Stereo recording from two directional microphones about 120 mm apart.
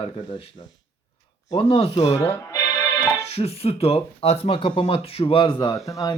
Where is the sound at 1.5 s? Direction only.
55° left (ahead or behind).